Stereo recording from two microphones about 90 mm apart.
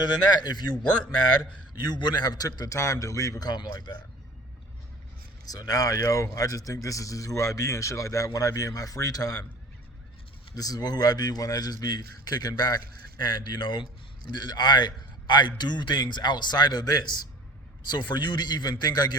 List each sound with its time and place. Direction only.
0.0 s speech: 50° left (ahead or behind)
1.9 s speech: 55° left (ahead or behind)
2.7 s speech: 40° left (ahead or behind)
5.5 s speech: 45° left (ahead or behind)
10.5 s speech: 45° left (ahead or behind)